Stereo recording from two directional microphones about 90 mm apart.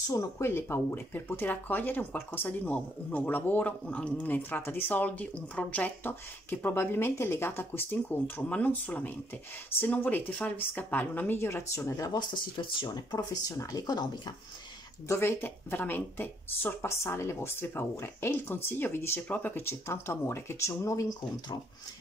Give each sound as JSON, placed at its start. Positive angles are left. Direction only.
{"t": 0.1, "sound": "speech", "side_deg": 30}
{"t": 12.1, "sound": "speech", "side_deg": 55}
{"t": 15.0, "sound": "speech", "side_deg": 30}